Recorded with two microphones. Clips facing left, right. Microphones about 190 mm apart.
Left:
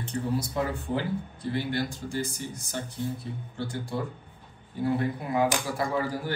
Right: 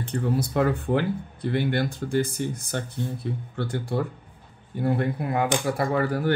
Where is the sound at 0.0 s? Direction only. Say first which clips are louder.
Right 3 dB; 60° right (ahead or behind).